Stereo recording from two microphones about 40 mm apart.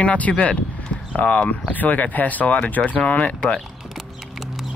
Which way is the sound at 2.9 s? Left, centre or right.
Left.